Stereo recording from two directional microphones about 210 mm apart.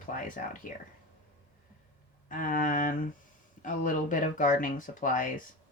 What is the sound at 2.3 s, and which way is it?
Speech, 40° left (ahead or behind).